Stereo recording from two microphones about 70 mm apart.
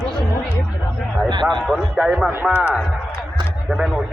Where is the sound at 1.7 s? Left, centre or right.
Centre.